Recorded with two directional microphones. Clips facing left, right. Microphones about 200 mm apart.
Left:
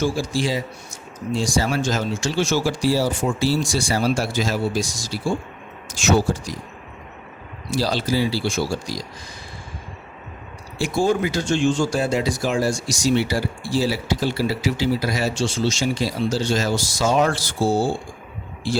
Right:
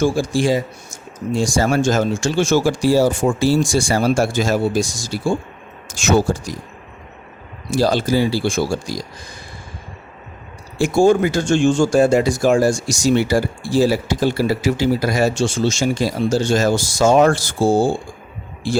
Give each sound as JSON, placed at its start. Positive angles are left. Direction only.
{"t": 0.0, "sound": "speech", "side_deg": -50}
{"t": 7.7, "sound": "speech", "side_deg": -50}
{"t": 10.8, "sound": "speech", "side_deg": -45}